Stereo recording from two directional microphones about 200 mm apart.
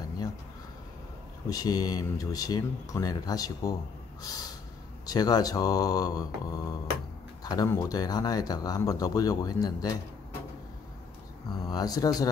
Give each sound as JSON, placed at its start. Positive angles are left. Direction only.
{"t": 1.5, "sound": "speech", "side_deg": 20}
{"t": 4.2, "sound": "snort", "side_deg": 20}
{"t": 5.0, "sound": "speech", "side_deg": 20}
{"t": 11.6, "sound": "speech", "side_deg": 20}